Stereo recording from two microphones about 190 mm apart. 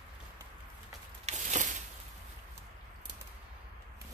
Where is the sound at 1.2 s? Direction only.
40° right (ahead or behind).